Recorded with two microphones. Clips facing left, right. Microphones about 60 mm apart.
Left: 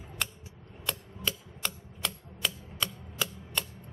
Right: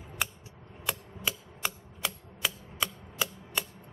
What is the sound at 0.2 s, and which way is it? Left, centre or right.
Typewriter, centre.